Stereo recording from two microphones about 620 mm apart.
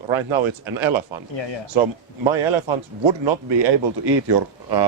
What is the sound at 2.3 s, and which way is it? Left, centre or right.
Speech, right.